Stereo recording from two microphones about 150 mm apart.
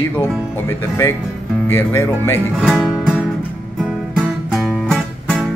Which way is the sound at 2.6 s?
5° right (ahead or behind).